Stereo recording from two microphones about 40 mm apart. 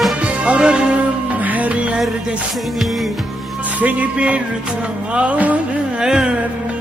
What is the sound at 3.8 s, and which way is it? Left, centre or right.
Speech, right.